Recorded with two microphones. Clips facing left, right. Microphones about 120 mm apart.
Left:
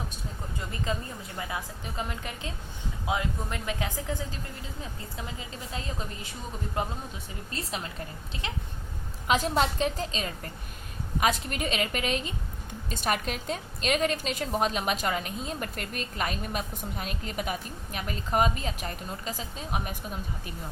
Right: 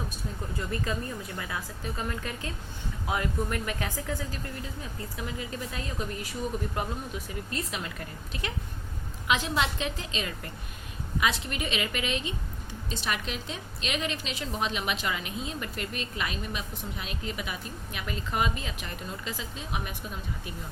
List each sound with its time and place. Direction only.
0.9 s a woman's voice: 20° left (ahead or behind)
6.8 s a woman's voice: 25° left (ahead or behind)
9.2 s a woman's voice: 40° left (ahead or behind)